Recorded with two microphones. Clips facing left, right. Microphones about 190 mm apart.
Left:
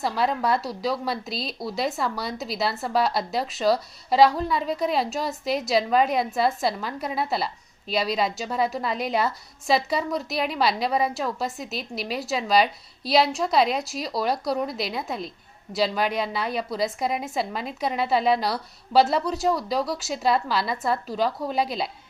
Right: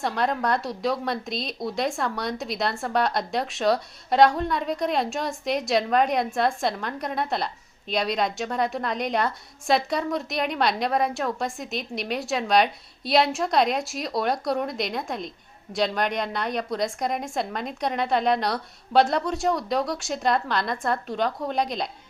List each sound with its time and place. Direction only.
0.0 s a woman's voice: 5° left (ahead or behind)